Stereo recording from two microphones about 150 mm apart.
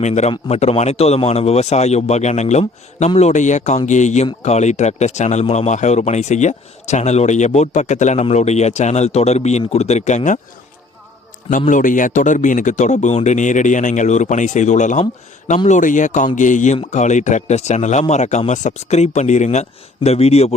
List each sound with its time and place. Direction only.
0.0 s speech: 50° left (ahead or behind)
11.5 s speech: 60° left (ahead or behind)